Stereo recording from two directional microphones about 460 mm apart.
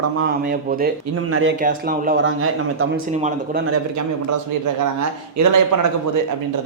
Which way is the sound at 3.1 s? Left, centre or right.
Centre.